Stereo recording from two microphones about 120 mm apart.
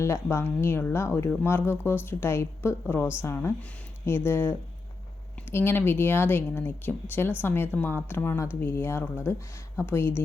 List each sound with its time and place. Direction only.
0.0 s speech: 25° left (ahead or behind)